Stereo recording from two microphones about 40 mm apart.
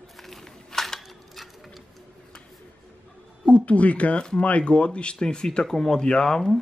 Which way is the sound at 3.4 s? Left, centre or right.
Left.